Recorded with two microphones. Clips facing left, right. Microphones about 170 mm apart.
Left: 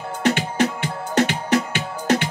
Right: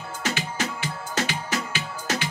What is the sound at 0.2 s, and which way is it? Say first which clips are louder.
Music: left 9 dB; 60° left (ahead or behind).